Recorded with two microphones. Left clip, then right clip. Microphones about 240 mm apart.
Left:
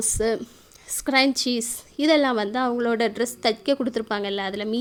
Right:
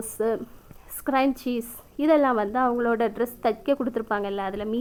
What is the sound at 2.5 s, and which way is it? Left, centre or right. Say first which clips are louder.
Speech: even; left.